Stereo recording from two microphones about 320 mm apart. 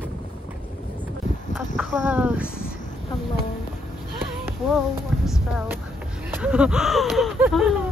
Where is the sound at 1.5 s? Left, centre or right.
Centre.